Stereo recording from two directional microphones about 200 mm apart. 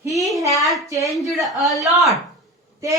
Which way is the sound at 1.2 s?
Centre (ahead or behind).